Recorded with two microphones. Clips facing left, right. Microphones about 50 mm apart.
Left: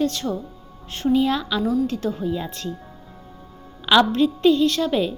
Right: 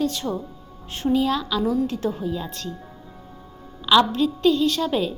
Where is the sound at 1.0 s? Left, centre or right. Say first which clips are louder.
Left 2 dB; centre.